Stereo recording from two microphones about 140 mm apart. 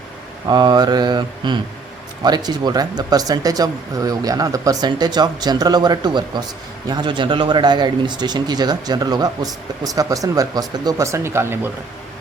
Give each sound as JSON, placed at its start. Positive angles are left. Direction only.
{"t": 0.4, "sound": "mantra", "side_deg": -30}
{"t": 2.2, "sound": "speech", "side_deg": -30}